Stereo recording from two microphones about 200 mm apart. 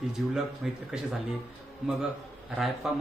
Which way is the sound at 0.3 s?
Centre (ahead or behind).